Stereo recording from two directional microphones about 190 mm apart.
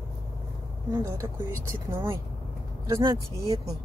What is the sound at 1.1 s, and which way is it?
Speech, 15° right (ahead or behind).